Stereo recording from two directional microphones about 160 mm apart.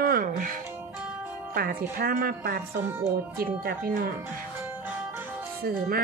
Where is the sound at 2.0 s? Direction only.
65° right (ahead or behind).